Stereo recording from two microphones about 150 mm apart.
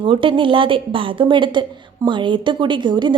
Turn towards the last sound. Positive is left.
turn(degrees=-30)  # may be behind; listen again after turning